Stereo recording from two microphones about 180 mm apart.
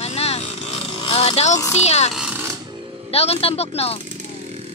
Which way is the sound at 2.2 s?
10° right (ahead or behind).